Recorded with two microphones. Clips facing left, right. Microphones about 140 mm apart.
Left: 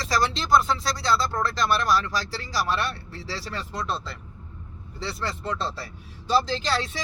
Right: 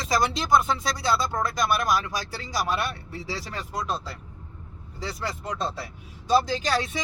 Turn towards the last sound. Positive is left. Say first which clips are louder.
# right 1 dB
turn(degrees=-15)  # may be behind; listen again after turning